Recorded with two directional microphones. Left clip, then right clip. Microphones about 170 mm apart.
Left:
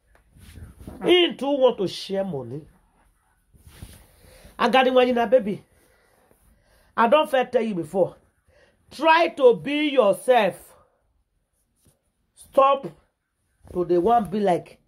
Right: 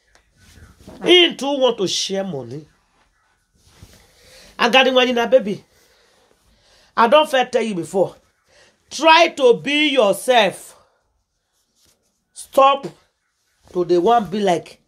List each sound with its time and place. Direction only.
1.0 s speech: 5° left (ahead or behind)
4.6 s speech: 20° left (ahead or behind)
6.8 s speech: 10° left (ahead or behind)
12.4 s speech: 5° left (ahead or behind)